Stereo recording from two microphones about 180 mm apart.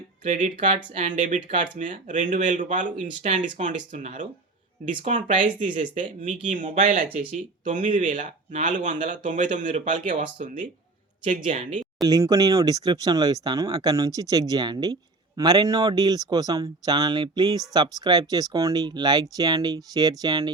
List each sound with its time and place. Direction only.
0.3 s speech: 45° right (ahead or behind)
12.0 s speech: 20° right (ahead or behind)